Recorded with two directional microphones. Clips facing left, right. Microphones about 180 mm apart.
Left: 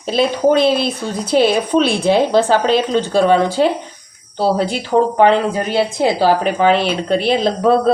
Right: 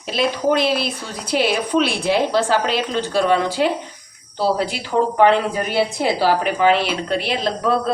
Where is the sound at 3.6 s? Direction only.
35° left (ahead or behind).